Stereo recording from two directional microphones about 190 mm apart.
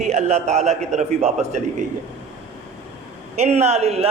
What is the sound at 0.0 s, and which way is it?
A man's voice, 35° right (ahead or behind).